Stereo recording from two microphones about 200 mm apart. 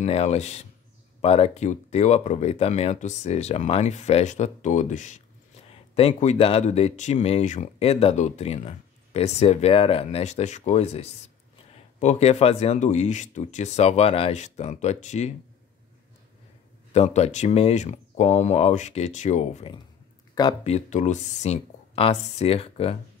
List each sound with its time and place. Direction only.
0.0 s speech: 30° left (ahead or behind)
16.9 s speech: 30° left (ahead or behind)